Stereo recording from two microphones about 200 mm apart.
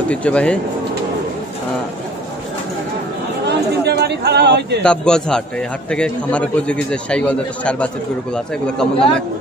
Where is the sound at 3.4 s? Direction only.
55° right (ahead or behind).